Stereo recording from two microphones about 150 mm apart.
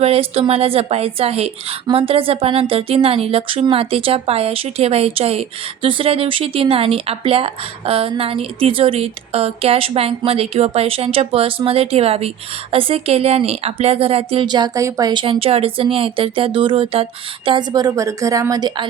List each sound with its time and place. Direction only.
0.0 s speech: 40° right (ahead or behind)